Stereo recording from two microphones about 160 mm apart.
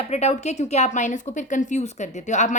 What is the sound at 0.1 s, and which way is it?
A woman's voice, 45° left (ahead or behind).